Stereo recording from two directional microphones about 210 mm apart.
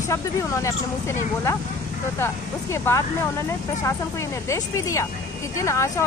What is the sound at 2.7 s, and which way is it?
Speech, 15° left (ahead or behind).